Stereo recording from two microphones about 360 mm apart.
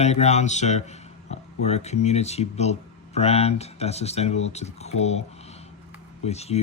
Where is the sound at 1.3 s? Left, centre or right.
Centre.